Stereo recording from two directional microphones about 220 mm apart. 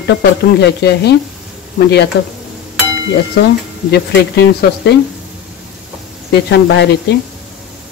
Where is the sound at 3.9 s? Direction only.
50° left (ahead or behind).